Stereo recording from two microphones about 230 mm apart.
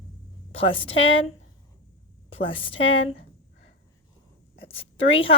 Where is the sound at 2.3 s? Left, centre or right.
Left.